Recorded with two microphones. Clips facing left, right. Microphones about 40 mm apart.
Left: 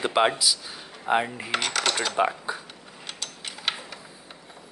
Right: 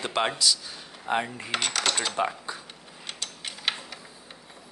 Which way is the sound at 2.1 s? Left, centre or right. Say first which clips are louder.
Left 4 dB; centre.